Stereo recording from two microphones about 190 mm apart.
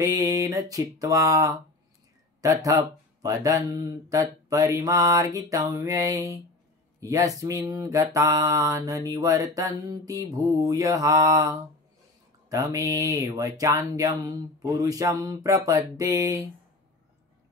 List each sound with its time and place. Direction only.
0.0 s mantra: 15° right (ahead or behind)
2.4 s speech: 20° right (ahead or behind)
4.1 s mantra: 15° right (ahead or behind)
12.4 s mantra: 15° right (ahead or behind)